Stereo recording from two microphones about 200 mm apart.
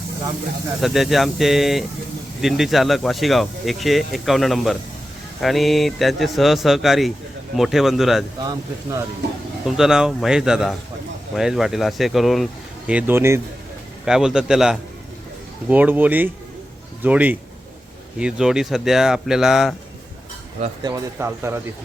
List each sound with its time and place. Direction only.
0.8 s speech: centre (ahead or behind)
8.4 s speech: 15° right (ahead or behind)
9.6 s speech: centre (ahead or behind)
20.8 s speech: 15° right (ahead or behind)